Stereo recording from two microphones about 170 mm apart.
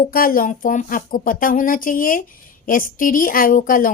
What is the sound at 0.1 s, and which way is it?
Speech, 60° left (ahead or behind).